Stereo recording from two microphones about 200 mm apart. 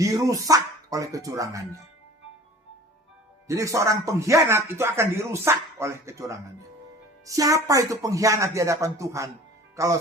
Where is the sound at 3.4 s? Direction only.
15° right (ahead or behind).